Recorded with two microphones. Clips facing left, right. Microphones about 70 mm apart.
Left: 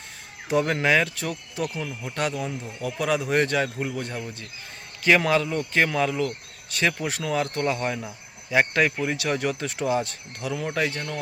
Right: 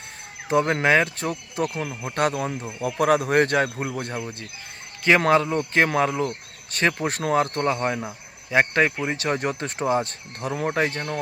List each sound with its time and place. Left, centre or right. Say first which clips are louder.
0.6 s a man's voice: right 2 dB; right